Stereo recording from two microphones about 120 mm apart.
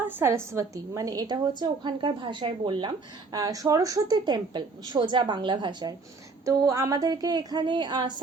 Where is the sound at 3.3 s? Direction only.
30° right (ahead or behind).